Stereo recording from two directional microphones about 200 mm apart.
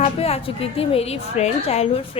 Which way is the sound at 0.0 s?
30° left (ahead or behind).